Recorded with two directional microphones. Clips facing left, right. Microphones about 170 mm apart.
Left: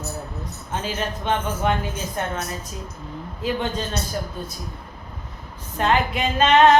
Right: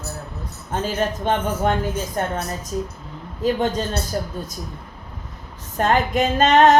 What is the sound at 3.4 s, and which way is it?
Female singing, 45° right (ahead or behind).